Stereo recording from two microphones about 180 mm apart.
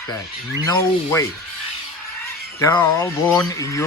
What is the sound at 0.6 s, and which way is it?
Speech, 15° left (ahead or behind).